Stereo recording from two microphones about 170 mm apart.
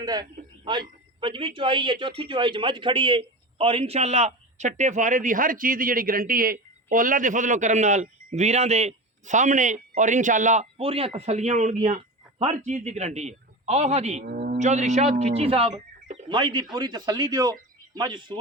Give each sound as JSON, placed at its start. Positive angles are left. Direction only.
{"t": 0.0, "sound": "a man's voice", "side_deg": -25}
{"t": 14.3, "sound": "a sound", "side_deg": -70}
{"t": 14.6, "sound": "a man's voice", "side_deg": -45}